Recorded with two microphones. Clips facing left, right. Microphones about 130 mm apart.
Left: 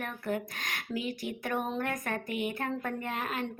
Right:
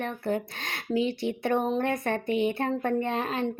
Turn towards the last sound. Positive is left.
turn(degrees=-30)  # may be behind; listen again after turning